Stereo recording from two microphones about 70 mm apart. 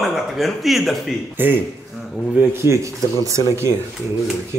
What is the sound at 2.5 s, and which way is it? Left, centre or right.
Speech, right.